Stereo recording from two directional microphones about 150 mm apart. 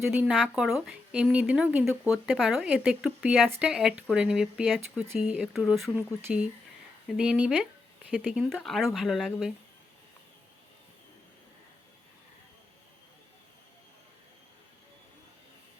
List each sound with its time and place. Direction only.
0.0 s speech: 15° right (ahead or behind)
7.2 s speech: 5° right (ahead or behind)